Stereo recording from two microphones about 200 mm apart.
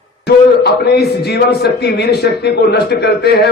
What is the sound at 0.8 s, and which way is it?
A man's voice, 55° left (ahead or behind).